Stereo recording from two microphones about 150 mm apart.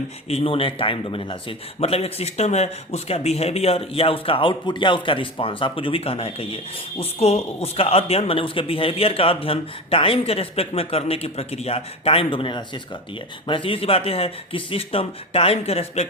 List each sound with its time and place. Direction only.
0.3 s speech: 40° left (ahead or behind)